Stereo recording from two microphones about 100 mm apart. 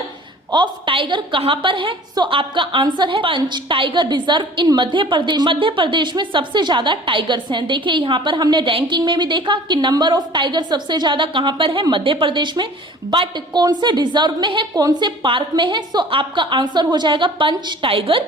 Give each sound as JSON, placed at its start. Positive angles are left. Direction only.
{"t": 0.5, "sound": "a woman's voice", "side_deg": -55}
{"t": 14.8, "sound": "a woman's voice", "side_deg": -40}